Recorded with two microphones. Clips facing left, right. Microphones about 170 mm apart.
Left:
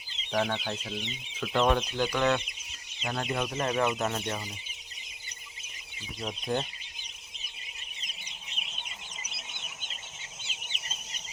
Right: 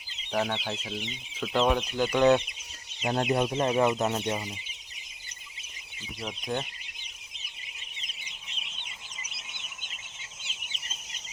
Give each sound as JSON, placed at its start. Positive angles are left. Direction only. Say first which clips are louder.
{"t": 0.3, "sound": "speech", "louder": "even", "side_deg": -5}
{"t": 2.1, "sound": "speech", "louder": "right 7 dB", "side_deg": -25}
{"t": 3.0, "sound": "chicken", "louder": "right 6 dB", "side_deg": -35}
{"t": 3.7, "sound": "speech", "louder": "right 1 dB", "side_deg": -15}